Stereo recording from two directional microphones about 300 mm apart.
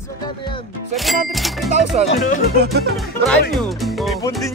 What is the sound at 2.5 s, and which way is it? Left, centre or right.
Music, right.